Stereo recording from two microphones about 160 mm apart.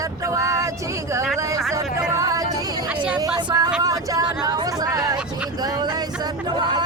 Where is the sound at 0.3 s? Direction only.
20° right (ahead or behind).